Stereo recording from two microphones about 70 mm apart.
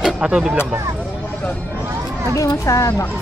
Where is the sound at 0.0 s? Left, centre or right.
Centre.